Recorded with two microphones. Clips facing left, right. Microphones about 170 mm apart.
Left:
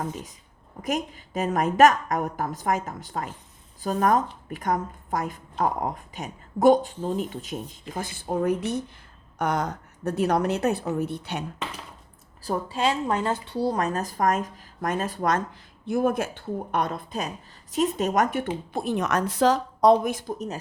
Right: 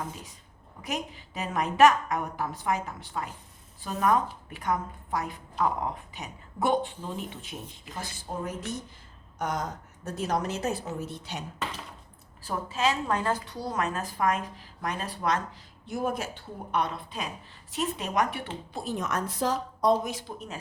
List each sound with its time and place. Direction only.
0.8 s a woman's voice: 45° left (ahead or behind)
12.4 s a woman's voice: 35° left (ahead or behind)
13.1 s a woman's voice: 25° left (ahead or behind); by 18.4 s 45° left (ahead or behind)
18.7 s a woman's voice: 60° left (ahead or behind); by 20.0 s 80° left
20.1 s a woman's voice: 45° left (ahead or behind)